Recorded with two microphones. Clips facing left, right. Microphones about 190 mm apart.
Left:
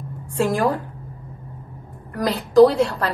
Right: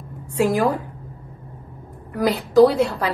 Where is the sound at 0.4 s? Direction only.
5° right (ahead or behind).